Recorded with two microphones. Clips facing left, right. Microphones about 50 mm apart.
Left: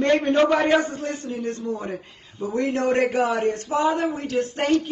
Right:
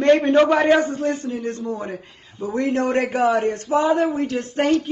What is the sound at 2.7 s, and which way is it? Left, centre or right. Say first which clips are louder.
A man's voice: left 1 dB; right.